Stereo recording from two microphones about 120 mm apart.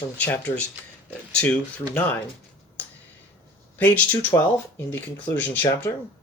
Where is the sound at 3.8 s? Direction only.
15° left (ahead or behind).